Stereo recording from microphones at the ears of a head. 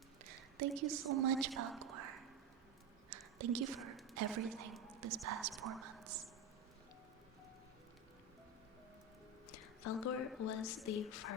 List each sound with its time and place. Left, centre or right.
0.3 s a woman's voice: right
3.1 s a sound: right
4.1 s a woman's voice: right
9.5 s a woman's voice: left